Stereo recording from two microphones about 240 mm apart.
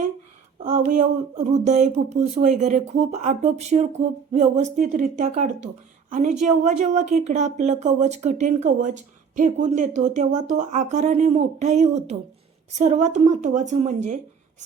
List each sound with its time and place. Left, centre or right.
0.6 s speech: right